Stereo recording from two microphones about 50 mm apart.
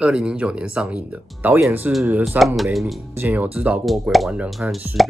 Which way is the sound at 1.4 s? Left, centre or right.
Right.